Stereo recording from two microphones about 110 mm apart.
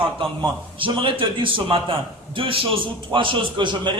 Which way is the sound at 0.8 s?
50° right (ahead or behind).